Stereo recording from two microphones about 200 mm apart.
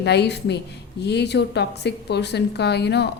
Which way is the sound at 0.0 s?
55° left (ahead or behind).